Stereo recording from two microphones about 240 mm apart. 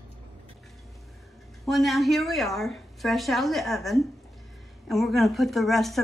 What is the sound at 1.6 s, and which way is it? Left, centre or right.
A woman's voice, centre.